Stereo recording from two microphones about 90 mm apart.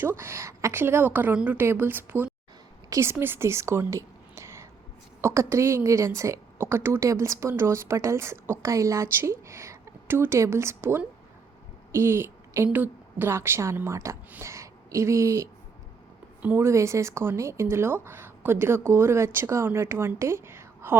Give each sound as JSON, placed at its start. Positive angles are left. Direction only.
{"t": 0.2, "sound": "a woman's voice", "side_deg": -30}
{"t": 16.4, "sound": "speech", "side_deg": -20}
{"t": 16.6, "sound": "a woman's voice", "side_deg": -35}